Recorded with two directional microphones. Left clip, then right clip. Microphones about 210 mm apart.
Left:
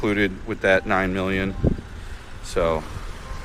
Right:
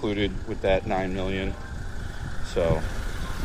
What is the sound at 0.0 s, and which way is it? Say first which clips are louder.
Speech: left 5 dB; 35° left (ahead or behind).